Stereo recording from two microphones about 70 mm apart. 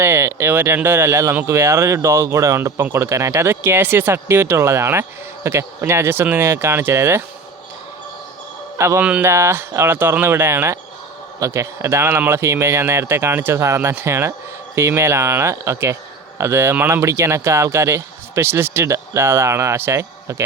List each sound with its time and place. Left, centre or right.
0.0 s speech: right
9.0 s speech: centre
9.2 s speech: right